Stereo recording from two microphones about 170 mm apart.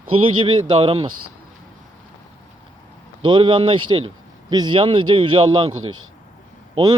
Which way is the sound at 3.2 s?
25° right (ahead or behind).